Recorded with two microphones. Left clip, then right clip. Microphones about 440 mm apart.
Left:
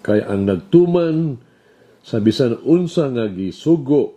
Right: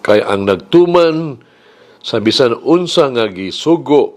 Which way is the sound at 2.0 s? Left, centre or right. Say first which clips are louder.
Right 6 dB; right.